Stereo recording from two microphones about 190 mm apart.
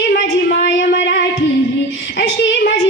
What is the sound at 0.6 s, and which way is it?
A woman's voice, 65° left (ahead or behind).